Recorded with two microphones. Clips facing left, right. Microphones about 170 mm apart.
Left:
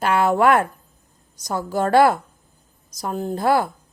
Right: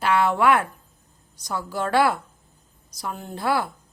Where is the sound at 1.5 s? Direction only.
45° left (ahead or behind).